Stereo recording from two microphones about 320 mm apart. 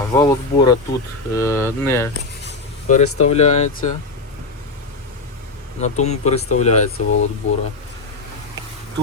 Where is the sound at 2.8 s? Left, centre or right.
Left.